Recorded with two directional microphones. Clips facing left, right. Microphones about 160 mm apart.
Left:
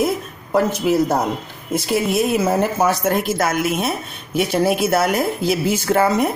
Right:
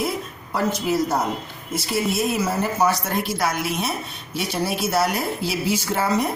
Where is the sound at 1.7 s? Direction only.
55° left (ahead or behind).